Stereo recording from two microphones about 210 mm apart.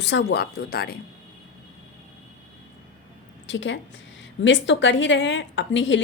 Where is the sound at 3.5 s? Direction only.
60° left (ahead or behind).